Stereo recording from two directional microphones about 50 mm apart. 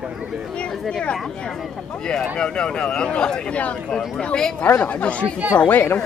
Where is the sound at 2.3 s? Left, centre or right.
Centre.